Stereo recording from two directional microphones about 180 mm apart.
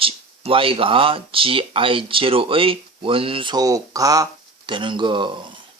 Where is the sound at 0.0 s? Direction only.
30° right (ahead or behind).